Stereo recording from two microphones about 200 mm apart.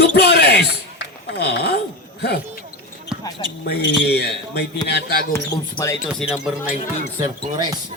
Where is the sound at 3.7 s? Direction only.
60° left (ahead or behind).